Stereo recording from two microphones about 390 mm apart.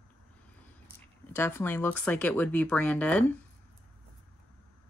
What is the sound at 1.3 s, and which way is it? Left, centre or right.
A woman's voice, centre.